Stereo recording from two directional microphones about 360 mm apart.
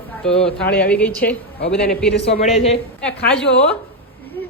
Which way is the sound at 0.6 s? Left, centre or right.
Left.